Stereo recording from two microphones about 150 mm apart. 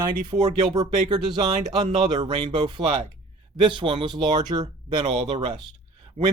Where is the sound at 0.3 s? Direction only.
30° right (ahead or behind).